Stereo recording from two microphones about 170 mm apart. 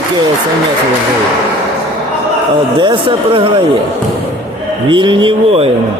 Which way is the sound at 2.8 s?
30° right (ahead or behind).